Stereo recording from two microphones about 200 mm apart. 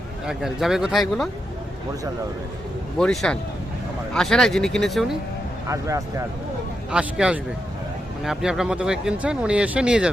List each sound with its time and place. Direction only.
0.3 s speech: centre (ahead or behind)
3.0 s speech: 5° left (ahead or behind)
5.6 s speech: 15° right (ahead or behind)
6.9 s speech: 5° right (ahead or behind)